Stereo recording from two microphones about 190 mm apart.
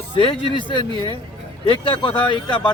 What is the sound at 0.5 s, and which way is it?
Speech, 25° left (ahead or behind).